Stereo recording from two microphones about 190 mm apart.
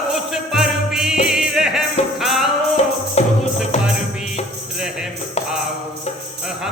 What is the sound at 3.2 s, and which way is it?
Music, 35° left (ahead or behind).